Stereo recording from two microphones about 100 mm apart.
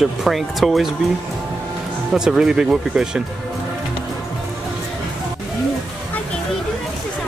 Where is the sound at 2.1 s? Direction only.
5° right (ahead or behind).